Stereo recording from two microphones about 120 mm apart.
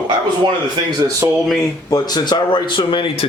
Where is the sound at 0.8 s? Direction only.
40° right (ahead or behind).